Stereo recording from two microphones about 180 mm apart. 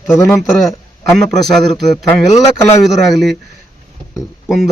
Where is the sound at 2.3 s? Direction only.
20° left (ahead or behind).